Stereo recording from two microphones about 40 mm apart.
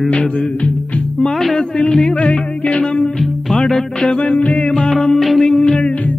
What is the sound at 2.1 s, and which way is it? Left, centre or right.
Music, left.